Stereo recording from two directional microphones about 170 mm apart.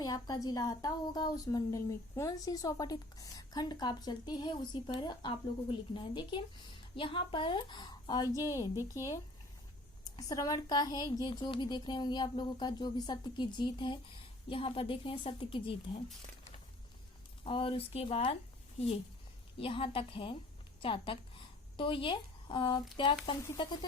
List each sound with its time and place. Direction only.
0.0 s a woman's voice: 25° left (ahead or behind)
10.0 s a woman's voice: 20° left (ahead or behind)
17.4 s speech: 30° left (ahead or behind)
19.5 s a woman's voice: 35° left (ahead or behind)